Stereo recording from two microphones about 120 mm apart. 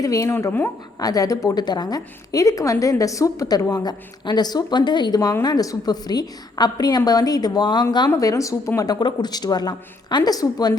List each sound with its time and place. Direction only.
0.0 s speech: 25° left (ahead or behind)
0.9 s a woman's voice: 30° left (ahead or behind)